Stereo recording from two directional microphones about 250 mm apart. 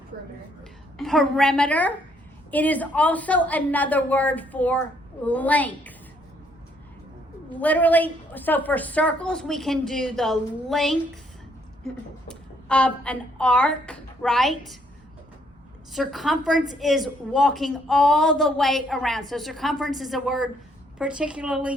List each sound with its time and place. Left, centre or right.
0.1 s a sound: right
0.9 s a woman's voice: centre
7.5 s a woman's voice: centre
12.3 s a woman's voice: centre
15.9 s a woman's voice: centre